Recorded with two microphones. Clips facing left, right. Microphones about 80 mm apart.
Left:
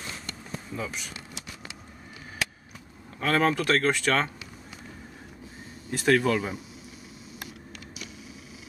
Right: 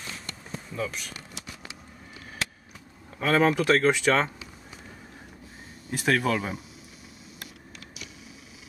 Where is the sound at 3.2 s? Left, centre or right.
Centre.